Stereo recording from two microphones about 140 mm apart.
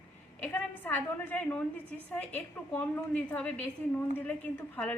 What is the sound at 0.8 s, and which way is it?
A woman's voice, 15° left (ahead or behind).